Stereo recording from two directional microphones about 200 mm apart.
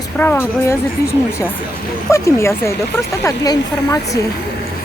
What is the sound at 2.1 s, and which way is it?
Speech, 15° left (ahead or behind).